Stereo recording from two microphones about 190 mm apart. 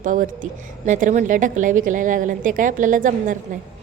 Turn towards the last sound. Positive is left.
turn(degrees=-45)  # may be behind; listen again after turning